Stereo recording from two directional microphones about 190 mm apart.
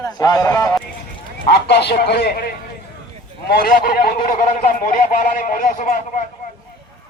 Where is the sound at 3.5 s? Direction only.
50° left (ahead or behind).